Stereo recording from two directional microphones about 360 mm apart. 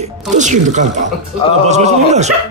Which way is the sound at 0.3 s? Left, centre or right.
Centre.